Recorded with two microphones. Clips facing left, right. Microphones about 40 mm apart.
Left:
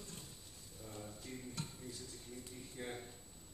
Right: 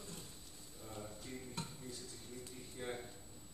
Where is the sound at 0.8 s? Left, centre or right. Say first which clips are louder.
Right 1 dB; centre.